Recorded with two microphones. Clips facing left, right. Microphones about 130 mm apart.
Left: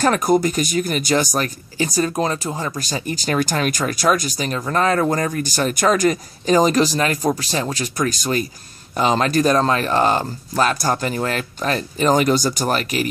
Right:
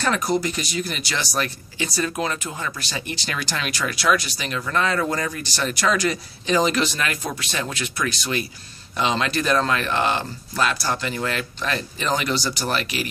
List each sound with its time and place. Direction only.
0.0 s speech: 50° left (ahead or behind)